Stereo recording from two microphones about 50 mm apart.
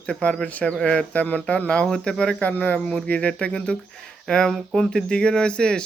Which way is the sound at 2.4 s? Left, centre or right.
Left.